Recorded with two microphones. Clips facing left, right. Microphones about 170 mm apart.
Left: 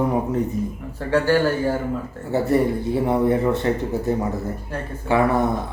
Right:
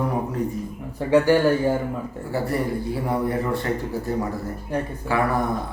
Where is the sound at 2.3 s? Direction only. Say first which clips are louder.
Left 6 dB; 25° left (ahead or behind).